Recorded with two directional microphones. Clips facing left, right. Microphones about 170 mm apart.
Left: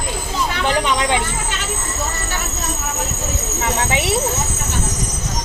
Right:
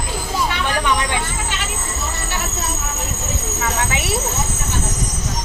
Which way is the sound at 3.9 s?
25° left (ahead or behind).